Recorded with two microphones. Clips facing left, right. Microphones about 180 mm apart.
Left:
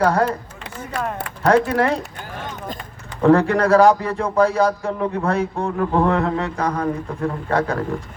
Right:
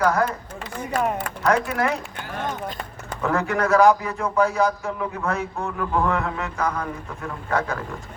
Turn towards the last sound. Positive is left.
turn(degrees=35)  # may be behind; listen again after turning